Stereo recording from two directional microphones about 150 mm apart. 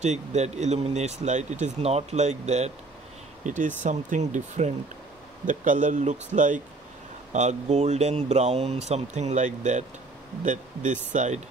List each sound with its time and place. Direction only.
0.0 s speech: 50° right (ahead or behind)